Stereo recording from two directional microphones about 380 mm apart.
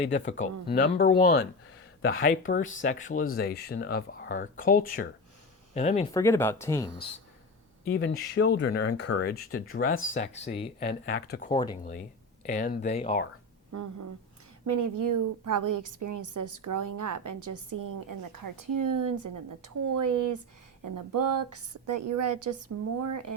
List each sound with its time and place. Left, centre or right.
0.0 s speech: centre
7.9 s speech: left
13.7 s a woman's voice: right
21.2 s speech: right
21.8 s a woman's voice: right